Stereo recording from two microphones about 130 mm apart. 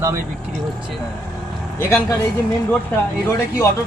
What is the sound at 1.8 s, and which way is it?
Speech, 20° left (ahead or behind).